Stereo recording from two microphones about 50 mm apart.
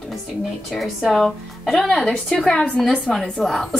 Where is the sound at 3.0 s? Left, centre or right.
Centre.